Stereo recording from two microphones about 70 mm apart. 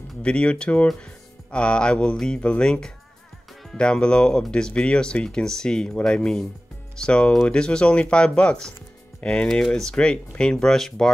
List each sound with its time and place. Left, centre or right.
0.2 s speech: centre